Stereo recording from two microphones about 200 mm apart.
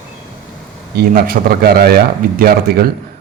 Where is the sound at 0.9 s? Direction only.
50° right (ahead or behind).